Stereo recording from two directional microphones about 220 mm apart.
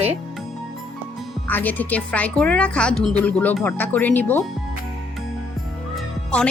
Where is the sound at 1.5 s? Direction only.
10° left (ahead or behind).